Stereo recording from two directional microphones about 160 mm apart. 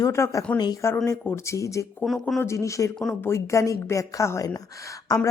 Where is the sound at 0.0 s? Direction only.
20° left (ahead or behind).